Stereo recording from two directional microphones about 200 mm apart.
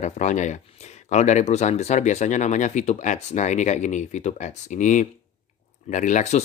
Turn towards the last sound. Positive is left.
turn(degrees=35)  # may be behind; listen again after turning